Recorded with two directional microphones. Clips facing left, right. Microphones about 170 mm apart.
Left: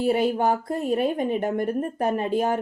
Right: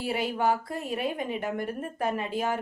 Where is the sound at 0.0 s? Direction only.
50° left (ahead or behind).